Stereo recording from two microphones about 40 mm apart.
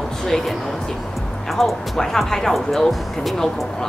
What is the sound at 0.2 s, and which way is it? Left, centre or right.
A woman's voice, centre.